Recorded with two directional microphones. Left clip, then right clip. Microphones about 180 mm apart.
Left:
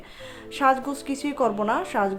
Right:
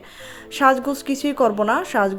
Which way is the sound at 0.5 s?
30° right (ahead or behind).